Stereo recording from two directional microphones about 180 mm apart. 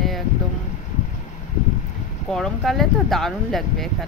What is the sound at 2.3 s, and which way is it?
Speech, centre (ahead or behind).